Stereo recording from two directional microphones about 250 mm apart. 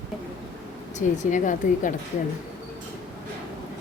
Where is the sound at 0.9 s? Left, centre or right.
Left.